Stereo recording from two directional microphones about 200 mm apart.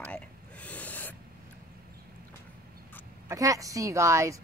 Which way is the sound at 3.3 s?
15° right (ahead or behind).